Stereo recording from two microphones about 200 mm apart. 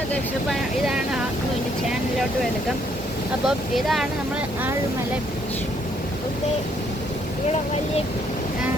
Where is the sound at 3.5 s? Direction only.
Centre (ahead or behind).